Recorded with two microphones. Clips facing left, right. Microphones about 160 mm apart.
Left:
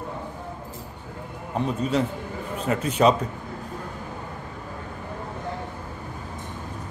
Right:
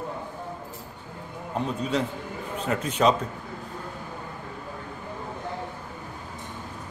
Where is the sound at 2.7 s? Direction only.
5° left (ahead or behind).